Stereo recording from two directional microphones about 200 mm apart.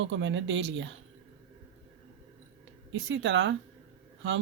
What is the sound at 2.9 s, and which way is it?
Speech, 70° right (ahead or behind).